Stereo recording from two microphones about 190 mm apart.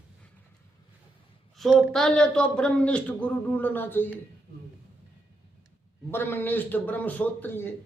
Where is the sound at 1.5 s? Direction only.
Centre (ahead or behind).